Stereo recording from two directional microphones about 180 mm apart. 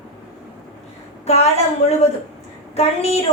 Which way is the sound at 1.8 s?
35° left (ahead or behind).